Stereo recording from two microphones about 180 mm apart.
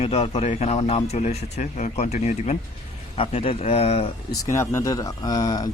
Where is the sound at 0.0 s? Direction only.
35° left (ahead or behind).